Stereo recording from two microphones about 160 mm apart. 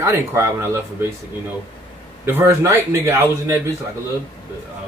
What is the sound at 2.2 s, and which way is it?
Speech, 15° right (ahead or behind).